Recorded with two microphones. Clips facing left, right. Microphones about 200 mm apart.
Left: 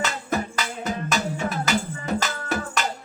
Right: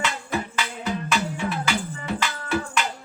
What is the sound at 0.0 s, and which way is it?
Music, 40° left (ahead or behind).